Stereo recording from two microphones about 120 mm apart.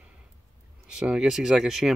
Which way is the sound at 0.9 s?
5° right (ahead or behind).